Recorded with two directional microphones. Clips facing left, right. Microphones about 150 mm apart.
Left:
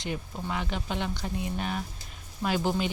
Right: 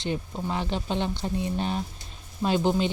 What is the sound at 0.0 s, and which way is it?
Speech, 25° right (ahead or behind).